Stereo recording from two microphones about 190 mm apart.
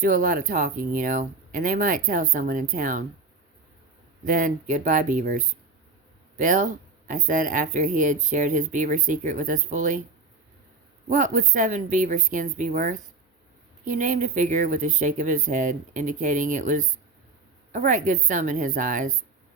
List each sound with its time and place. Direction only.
0.0 s speech: 45° right (ahead or behind)
4.3 s speech: 45° right (ahead or behind)
11.1 s speech: 40° right (ahead or behind)